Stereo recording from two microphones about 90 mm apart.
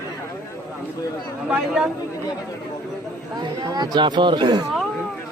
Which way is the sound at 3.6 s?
50° right (ahead or behind).